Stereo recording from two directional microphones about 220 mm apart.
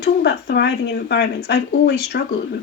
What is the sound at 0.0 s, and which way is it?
Speech, 50° left (ahead or behind).